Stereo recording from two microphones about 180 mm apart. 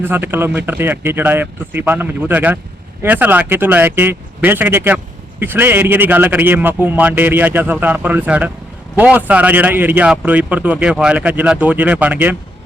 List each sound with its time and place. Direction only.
0.0 s speech: 10° right (ahead or behind)